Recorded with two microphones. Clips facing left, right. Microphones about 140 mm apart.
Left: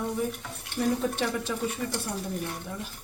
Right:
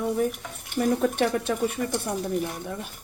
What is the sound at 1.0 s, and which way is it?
Speech, 55° right (ahead or behind).